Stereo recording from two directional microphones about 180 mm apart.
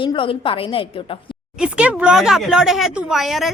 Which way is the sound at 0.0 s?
30° left (ahead or behind).